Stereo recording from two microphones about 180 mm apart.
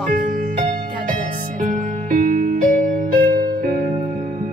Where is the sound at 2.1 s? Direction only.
50° right (ahead or behind).